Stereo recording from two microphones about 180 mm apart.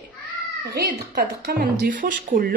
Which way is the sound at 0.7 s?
60° right (ahead or behind).